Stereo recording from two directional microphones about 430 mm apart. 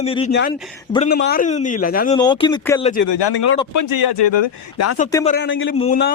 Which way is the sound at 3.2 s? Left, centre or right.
Left.